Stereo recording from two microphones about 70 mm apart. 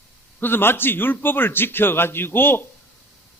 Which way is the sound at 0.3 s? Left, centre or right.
Left.